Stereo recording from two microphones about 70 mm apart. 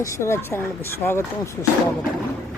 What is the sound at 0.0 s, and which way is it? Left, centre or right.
Speech, left.